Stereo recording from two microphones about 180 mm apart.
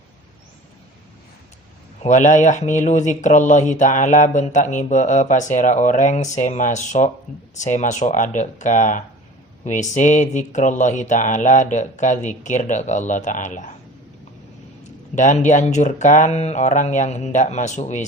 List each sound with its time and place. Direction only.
2.0 s speech: 40° left (ahead or behind)
15.1 s speech: 40° left (ahead or behind)